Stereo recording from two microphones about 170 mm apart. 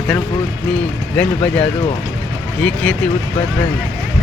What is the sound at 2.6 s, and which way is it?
Speech, 5° left (ahead or behind).